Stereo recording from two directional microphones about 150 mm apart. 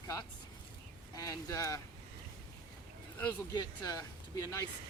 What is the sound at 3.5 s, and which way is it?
Speech, 30° left (ahead or behind).